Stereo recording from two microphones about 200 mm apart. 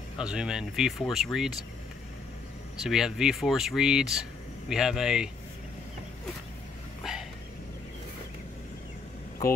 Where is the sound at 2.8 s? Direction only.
Centre (ahead or behind).